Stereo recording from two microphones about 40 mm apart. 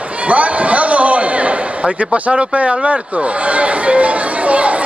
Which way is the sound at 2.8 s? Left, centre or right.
Right.